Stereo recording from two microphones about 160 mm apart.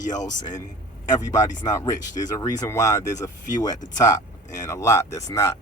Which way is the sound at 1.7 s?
20° left (ahead or behind).